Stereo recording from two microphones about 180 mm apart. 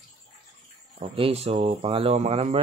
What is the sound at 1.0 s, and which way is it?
Speech, 30° right (ahead or behind).